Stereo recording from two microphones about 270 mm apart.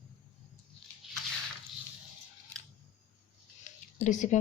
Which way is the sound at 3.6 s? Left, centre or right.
Left.